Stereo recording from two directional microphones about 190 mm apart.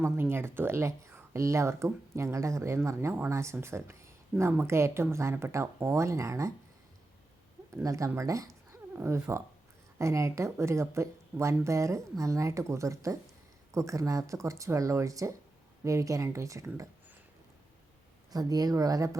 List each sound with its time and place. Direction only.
0.0 s speech: 10° right (ahead or behind)
7.8 s speech: 15° right (ahead or behind)
18.3 s speech: 20° right (ahead or behind)